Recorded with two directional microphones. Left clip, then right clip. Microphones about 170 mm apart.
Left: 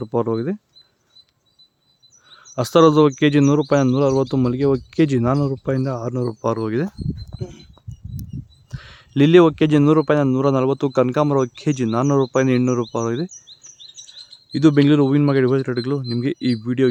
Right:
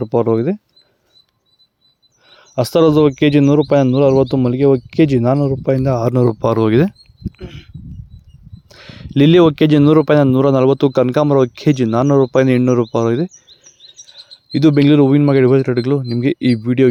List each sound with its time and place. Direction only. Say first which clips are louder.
0.0 s speech: right 7 dB; 30° right (ahead or behind)
2.3 s speech: right 2 dB; 20° right (ahead or behind)
5.8 s speech: right 9 dB; 40° right (ahead or behind)
8.7 s speech: right 6 dB; 20° right (ahead or behind)
14.5 s speech: right 3 dB; 25° right (ahead or behind)